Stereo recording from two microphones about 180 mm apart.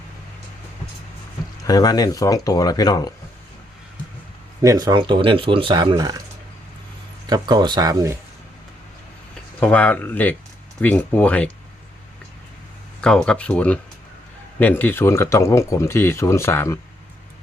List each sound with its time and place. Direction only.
1.6 s speech: 20° left (ahead or behind)
4.6 s speech: 20° right (ahead or behind)
7.3 s speech: 20° right (ahead or behind)
9.6 s speech: 5° left (ahead or behind)
13.0 s speech: 5° left (ahead or behind)